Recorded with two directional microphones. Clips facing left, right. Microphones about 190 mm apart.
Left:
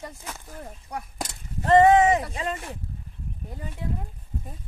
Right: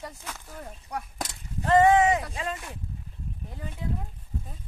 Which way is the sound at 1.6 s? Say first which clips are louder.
Left 3 dB; 35° left (ahead or behind).